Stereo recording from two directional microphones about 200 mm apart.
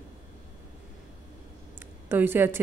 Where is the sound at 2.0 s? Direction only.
10° right (ahead or behind).